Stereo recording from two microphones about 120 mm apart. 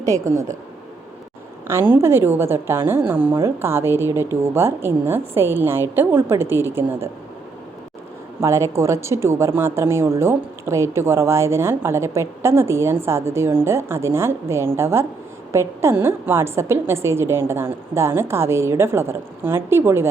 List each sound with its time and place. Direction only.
0.0 s speech: 25° right (ahead or behind)
1.6 s speech: 20° right (ahead or behind)
8.4 s speech: 25° right (ahead or behind)